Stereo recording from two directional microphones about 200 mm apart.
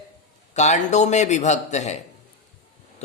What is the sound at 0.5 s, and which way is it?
Speech, 35° left (ahead or behind).